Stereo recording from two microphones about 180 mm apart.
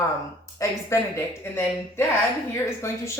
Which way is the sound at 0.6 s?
15° left (ahead or behind).